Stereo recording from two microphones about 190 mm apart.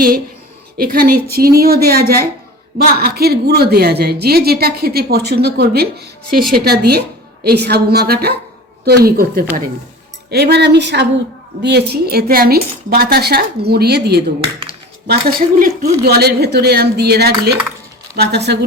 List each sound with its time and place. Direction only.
0.8 s a woman's voice: 50° right (ahead or behind)